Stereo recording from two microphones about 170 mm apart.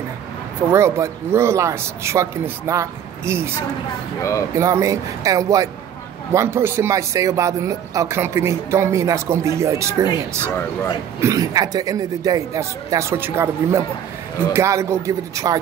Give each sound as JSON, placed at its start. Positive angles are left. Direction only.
{"t": 0.7, "sound": "speech", "side_deg": -15}
{"t": 4.2, "sound": "speech", "side_deg": 20}
{"t": 4.6, "sound": "speech", "side_deg": -15}